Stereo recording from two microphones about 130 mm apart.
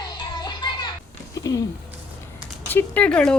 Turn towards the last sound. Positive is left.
turn(degrees=10)  # may be behind; listen again after turning